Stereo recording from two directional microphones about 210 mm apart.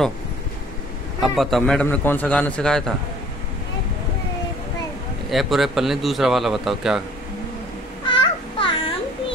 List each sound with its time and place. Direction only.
1.2 s speech: centre (ahead or behind)
5.3 s speech: centre (ahead or behind)
8.1 s a sound: 25° left (ahead or behind)